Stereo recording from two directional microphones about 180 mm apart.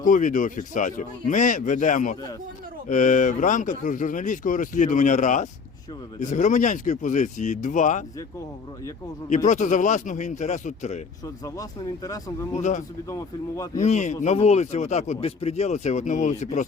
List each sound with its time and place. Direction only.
0.0 s speech: 45° left (ahead or behind)
9.3 s speech: 45° left (ahead or behind)
12.0 s speech: 20° left (ahead or behind)
12.5 s speech: 40° left (ahead or behind)
13.1 s speech: 20° left (ahead or behind)
13.8 s speech: 40° left (ahead or behind)